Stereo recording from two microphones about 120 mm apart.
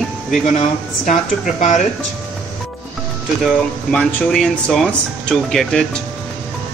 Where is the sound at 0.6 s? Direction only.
90° left.